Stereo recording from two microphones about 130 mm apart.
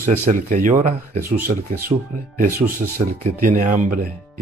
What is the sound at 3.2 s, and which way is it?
Speech, 90° right.